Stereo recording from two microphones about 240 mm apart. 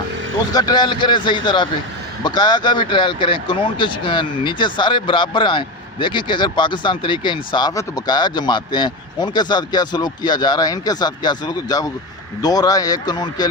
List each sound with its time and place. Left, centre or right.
0.5 s speech: centre